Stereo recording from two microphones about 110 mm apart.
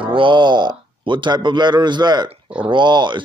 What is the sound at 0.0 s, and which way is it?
Speech, 50° right (ahead or behind).